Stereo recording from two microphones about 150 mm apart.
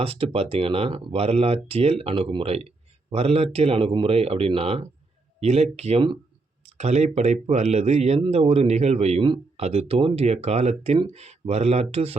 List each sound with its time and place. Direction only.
0.0 s speech: 40° right (ahead or behind)